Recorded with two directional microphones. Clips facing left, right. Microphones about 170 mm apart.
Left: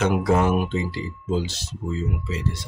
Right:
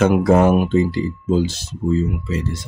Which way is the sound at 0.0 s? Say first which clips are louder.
Right 6 dB; 50° right (ahead or behind).